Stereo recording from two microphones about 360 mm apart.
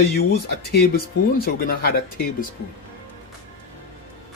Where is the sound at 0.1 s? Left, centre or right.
Left.